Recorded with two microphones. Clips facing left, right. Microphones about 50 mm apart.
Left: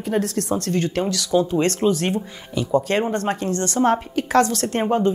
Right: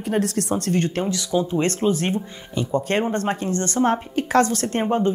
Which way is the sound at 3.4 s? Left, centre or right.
Right.